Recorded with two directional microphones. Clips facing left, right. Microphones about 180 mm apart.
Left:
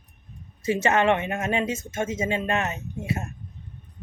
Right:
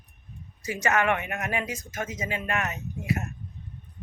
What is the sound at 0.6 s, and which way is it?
Speech, 25° left (ahead or behind).